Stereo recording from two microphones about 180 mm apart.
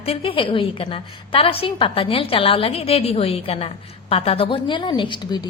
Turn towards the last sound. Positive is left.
turn(degrees=25)  # may be behind; listen again after turning